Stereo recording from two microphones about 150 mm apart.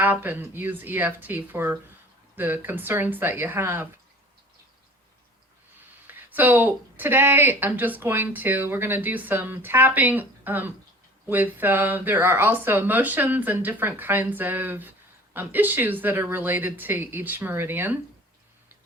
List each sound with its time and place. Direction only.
0.0 s speech: 10° right (ahead or behind)
6.1 s speech: 10° right (ahead or behind)